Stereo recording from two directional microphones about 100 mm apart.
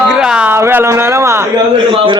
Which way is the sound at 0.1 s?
5° right (ahead or behind).